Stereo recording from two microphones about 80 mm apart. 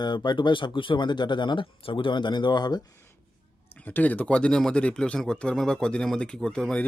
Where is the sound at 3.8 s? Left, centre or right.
Left.